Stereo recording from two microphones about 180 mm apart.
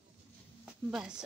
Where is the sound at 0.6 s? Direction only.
5° right (ahead or behind).